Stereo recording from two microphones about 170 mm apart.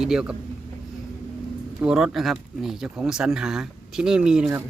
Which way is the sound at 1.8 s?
5° right (ahead or behind).